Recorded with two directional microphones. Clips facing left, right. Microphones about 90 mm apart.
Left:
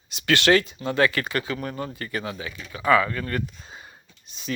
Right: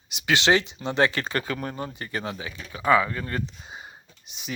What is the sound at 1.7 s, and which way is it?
Speech, 25° right (ahead or behind).